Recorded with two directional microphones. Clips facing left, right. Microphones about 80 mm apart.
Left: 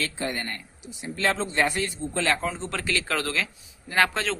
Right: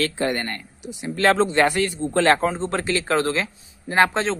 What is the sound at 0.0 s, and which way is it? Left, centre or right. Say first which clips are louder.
Speech: right 7 dB; right.